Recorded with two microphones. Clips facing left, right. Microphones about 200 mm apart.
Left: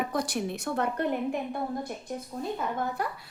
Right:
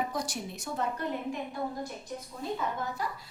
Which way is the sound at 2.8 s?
60° left (ahead or behind).